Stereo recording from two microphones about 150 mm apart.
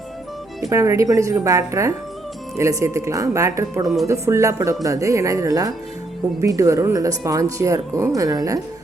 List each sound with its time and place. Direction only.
0.7 s speech: 20° right (ahead or behind)